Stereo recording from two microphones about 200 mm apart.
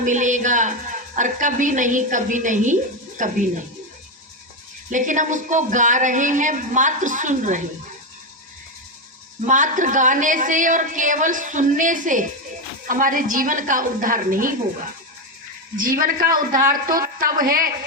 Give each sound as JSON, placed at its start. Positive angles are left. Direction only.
{"t": 0.0, "sound": "music", "side_deg": -40}
{"t": 1.1, "sound": "a woman's voice", "side_deg": -40}
{"t": 4.9, "sound": "a woman's voice", "side_deg": -40}
{"t": 9.5, "sound": "a woman's voice", "side_deg": -40}
{"t": 15.7, "sound": "a woman's voice", "side_deg": -45}